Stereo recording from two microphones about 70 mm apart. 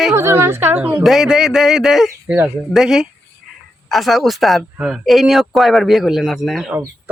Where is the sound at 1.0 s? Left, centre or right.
Centre.